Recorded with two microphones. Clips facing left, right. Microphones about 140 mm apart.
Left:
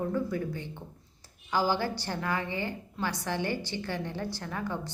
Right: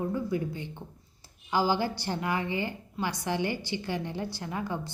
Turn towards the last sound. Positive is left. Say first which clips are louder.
# right 1 dB
turn(degrees=-15)  # may be behind; listen again after turning